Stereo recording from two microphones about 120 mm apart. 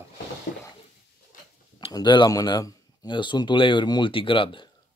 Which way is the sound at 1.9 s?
40° left (ahead or behind).